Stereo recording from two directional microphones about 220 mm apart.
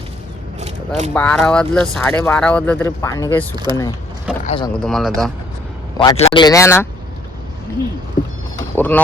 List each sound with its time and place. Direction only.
0.6 s single-lens reflex camera: 30° right (ahead or behind)
1.1 s speech: 5° left (ahead or behind)
3.5 s speech: 20° right (ahead or behind)
4.4 s speech: 20° left (ahead or behind)
4.8 s speech: centre (ahead or behind)
6.0 s speech: 25° left (ahead or behind)
8.5 s vehicle: 10° left (ahead or behind)